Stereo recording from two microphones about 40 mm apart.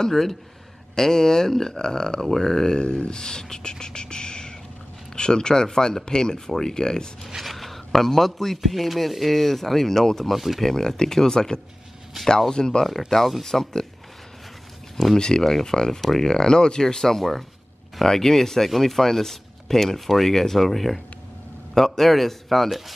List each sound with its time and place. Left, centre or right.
0.0 s speech: centre
3.8 s a sound: left
5.1 s speech: left
7.2 s speech: centre
10.3 s speech: centre
10.6 s speech: centre
13.1 s speech: centre
15.1 s speech: centre